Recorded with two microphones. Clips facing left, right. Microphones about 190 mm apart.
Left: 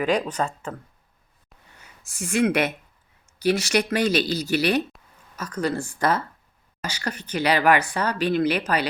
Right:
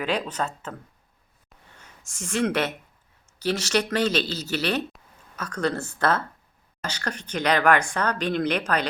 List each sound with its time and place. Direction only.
0.0 s a woman's voice: 10° left (ahead or behind)
1.8 s a woman's voice: 10° left (ahead or behind)